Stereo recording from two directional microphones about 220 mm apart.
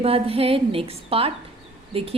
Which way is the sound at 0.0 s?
25° right (ahead or behind).